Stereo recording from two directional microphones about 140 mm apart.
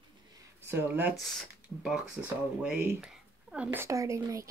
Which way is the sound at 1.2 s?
Centre (ahead or behind).